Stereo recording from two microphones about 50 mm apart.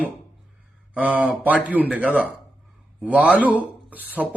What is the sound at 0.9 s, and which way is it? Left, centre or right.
Speech, right.